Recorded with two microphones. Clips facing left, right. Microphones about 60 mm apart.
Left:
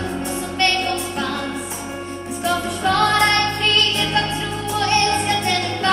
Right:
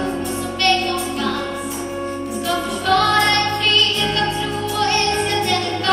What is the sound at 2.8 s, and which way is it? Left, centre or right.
Music, left.